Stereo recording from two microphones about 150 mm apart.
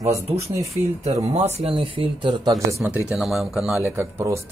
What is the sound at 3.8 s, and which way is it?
Speech, 15° right (ahead or behind).